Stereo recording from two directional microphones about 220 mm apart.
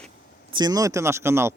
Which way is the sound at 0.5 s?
20° right (ahead or behind).